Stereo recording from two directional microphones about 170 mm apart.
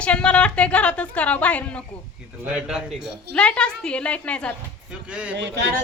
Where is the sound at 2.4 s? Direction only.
5° right (ahead or behind).